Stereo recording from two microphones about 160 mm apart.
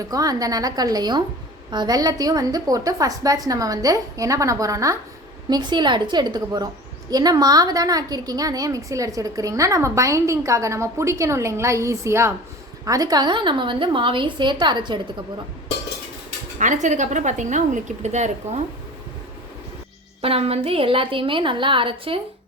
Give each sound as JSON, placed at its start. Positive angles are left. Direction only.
{"t": 0.0, "sound": "a woman's voice", "side_deg": -20}
{"t": 16.6, "sound": "a woman's voice", "side_deg": -50}
{"t": 20.2, "sound": "a woman's voice", "side_deg": -40}